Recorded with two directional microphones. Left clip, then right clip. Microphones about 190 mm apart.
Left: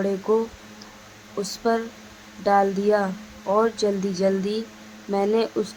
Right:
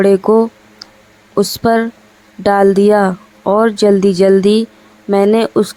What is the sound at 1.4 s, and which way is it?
Speech, 40° right (ahead or behind).